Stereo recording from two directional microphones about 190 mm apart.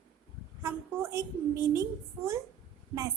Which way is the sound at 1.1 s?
15° right (ahead or behind).